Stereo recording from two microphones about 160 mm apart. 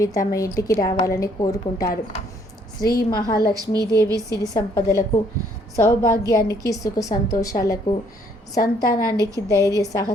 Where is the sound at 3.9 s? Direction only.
20° right (ahead or behind).